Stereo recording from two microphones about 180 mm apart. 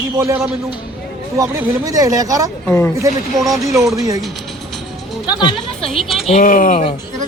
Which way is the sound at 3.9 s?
20° right (ahead or behind).